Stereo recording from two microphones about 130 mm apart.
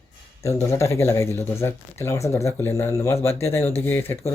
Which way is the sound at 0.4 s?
20° left (ahead or behind).